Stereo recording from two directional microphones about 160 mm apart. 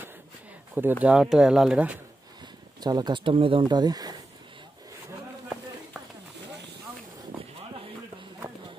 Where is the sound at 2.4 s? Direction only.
25° right (ahead or behind).